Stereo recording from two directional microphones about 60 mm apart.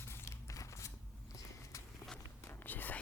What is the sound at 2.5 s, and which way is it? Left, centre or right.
Whispering, left.